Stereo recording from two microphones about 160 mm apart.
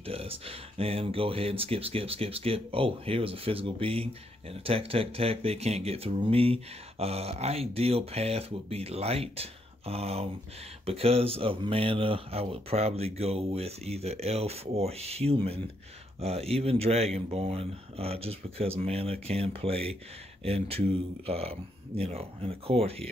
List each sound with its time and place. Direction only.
0.0 s speech: 35° right (ahead or behind)